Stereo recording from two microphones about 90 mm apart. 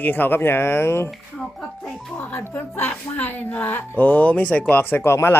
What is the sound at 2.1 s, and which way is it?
Speech, 20° left (ahead or behind).